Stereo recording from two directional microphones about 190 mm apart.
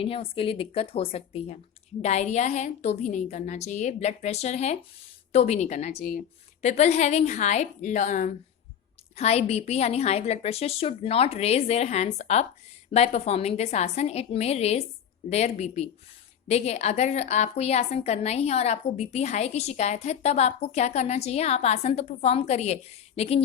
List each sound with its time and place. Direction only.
0.0 s a woman's voice: 30° left (ahead or behind)